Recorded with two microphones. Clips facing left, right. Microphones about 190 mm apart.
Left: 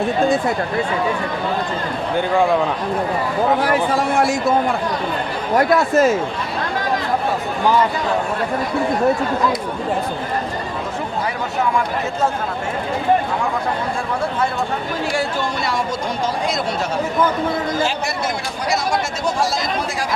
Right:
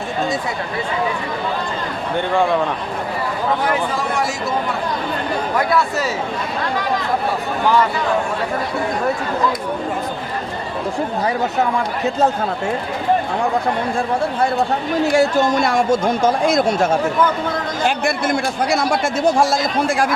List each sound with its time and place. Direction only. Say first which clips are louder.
4.1 s speech: left 4 dB; 55° left (ahead or behind)
5.5 s speech: left 6 dB; 45° left (ahead or behind)
15.1 s speech: right 9 dB; 45° right (ahead or behind)